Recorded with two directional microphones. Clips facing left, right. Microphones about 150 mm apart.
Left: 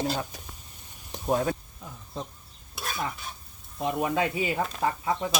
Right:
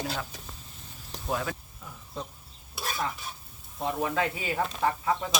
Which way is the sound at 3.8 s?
20° left (ahead or behind).